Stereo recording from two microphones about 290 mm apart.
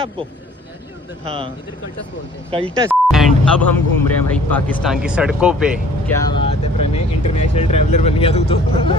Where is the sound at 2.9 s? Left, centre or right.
Centre.